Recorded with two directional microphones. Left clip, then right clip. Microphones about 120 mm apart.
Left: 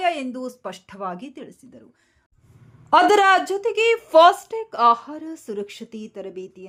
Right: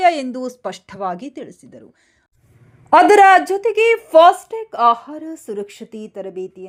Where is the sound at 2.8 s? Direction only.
25° right (ahead or behind).